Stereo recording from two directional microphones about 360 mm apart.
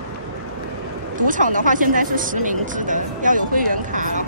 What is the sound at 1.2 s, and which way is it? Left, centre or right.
Speech, right.